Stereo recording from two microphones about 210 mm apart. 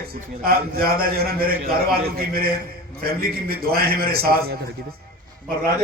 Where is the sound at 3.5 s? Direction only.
45° right (ahead or behind).